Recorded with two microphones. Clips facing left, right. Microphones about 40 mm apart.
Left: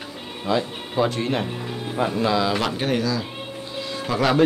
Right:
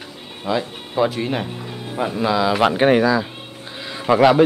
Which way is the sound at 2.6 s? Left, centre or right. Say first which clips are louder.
Right 8 dB; right.